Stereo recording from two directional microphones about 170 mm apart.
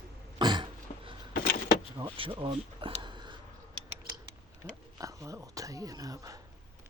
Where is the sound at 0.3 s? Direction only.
25° right (ahead or behind).